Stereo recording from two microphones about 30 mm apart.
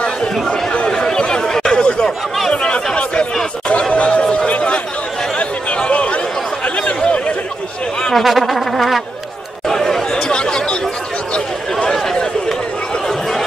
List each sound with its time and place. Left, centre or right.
0.0 s chatter: left
0.9 s a sound: left
2.5 s chatter: left
3.9 s chatter: left
8.1 s speech: centre
9.7 s chatter: centre
10.2 s chatter: left